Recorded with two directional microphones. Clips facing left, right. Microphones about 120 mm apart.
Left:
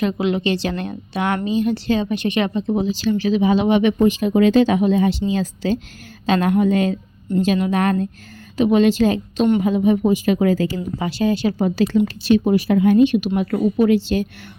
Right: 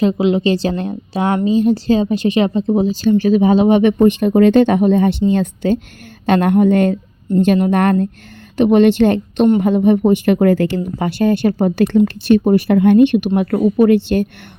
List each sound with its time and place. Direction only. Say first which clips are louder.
0.0 s a woman's voice: right 5 dB; 30° right (ahead or behind); by 14.3 s 55° right (ahead or behind)